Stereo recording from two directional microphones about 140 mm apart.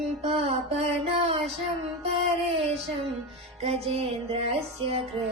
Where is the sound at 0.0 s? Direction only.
50° right (ahead or behind).